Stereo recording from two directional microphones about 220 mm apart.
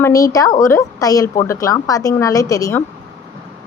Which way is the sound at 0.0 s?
15° left (ahead or behind).